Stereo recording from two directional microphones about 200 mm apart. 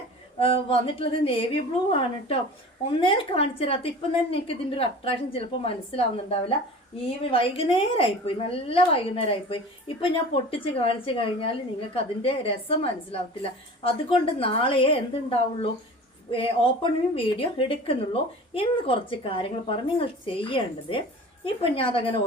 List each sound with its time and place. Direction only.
0.3 s a woman's voice: 30° left (ahead or behind)
7.3 s a woman's voice: 25° left (ahead or behind)